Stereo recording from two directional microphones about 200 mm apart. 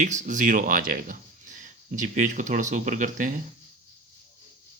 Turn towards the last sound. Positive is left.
turn(degrees=-40)  # may be behind; listen again after turning